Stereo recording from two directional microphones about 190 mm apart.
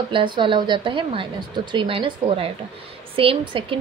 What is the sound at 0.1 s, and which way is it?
A woman's voice, 25° right (ahead or behind).